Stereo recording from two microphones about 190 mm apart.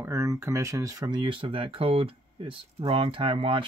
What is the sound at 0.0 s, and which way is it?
Speech, 15° right (ahead or behind).